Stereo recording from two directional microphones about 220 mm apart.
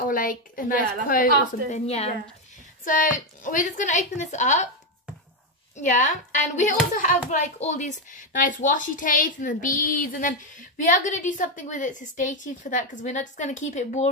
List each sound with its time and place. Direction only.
0.0 s a child's voice: 40° left (ahead or behind)
5.8 s a child's voice: 35° left (ahead or behind)